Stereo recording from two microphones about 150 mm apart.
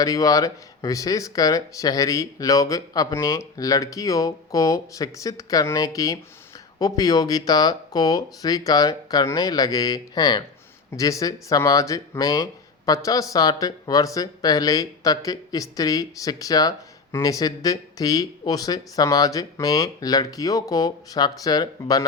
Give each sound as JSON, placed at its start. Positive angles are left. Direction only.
{"t": 0.0, "sound": "speech", "side_deg": 25}